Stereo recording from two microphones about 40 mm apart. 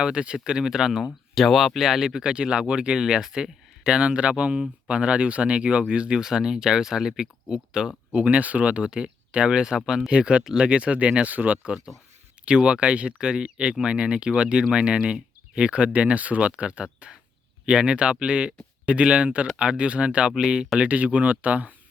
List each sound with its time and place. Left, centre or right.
0.0 s speech: right
1.4 s speech: centre; by 3.0 s right
3.0 s speech: centre; by 11.7 s right
12.5 s speech: right
20.3 s speech: centre
20.7 s speech: right